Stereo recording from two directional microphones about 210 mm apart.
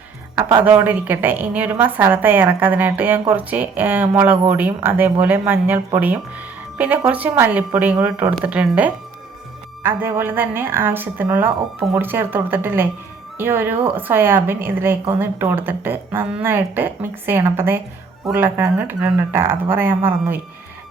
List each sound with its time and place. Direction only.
0.3 s speech: 25° right (ahead or behind)
0.8 s a woman's voice: 10° right (ahead or behind)